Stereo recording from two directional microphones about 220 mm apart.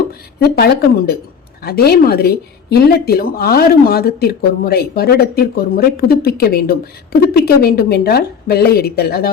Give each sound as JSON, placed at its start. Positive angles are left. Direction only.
{"t": 0.1, "sound": "speech", "side_deg": 45}